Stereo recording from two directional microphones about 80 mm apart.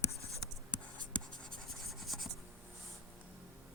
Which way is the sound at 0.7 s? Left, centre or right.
Centre.